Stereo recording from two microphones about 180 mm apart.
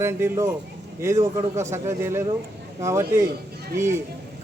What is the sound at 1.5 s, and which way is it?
Speech, 15° right (ahead or behind).